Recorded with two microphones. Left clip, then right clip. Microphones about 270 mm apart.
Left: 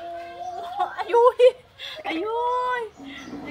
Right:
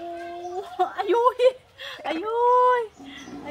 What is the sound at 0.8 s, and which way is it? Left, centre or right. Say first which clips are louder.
Whimper: left 2 dB; right.